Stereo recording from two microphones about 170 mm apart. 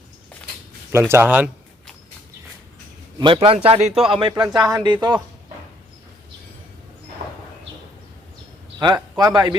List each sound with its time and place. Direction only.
0.9 s speech: 15° right (ahead or behind)
3.2 s a man's voice: 30° right (ahead or behind)
4.2 s speech: 25° right (ahead or behind)
8.8 s speech: 25° right (ahead or behind)